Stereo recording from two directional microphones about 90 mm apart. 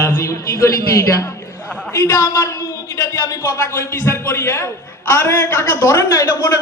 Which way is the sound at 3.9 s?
30° left (ahead or behind).